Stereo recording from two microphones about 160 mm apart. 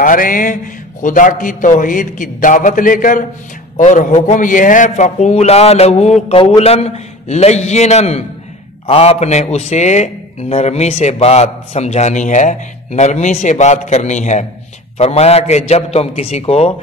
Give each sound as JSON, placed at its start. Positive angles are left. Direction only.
{"t": 0.0, "sound": "a man's voice", "side_deg": 60}